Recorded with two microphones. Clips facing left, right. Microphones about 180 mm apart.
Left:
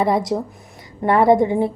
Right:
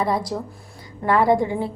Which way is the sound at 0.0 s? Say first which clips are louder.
Left 5 dB; 25° left (ahead or behind).